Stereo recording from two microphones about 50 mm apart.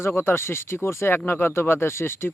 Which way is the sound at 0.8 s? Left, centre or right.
Left.